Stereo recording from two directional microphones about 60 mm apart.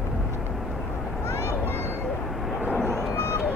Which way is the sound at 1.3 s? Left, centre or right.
Right.